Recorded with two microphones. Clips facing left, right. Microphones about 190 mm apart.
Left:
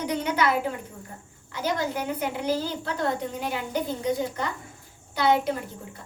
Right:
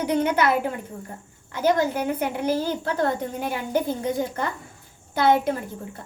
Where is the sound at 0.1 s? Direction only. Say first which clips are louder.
Right 5 dB; 55° right (ahead or behind).